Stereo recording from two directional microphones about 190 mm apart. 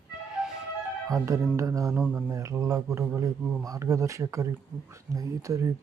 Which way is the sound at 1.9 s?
5° right (ahead or behind).